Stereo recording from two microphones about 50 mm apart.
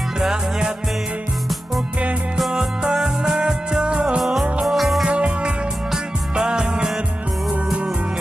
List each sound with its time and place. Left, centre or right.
0.2 s music: centre
2.3 s music: centre
4.2 s music: centre
5.0 s music: right